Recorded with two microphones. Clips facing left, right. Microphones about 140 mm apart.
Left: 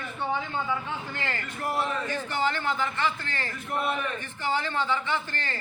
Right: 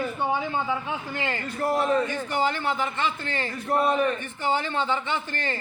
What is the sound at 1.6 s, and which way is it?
Speech, 40° right (ahead or behind).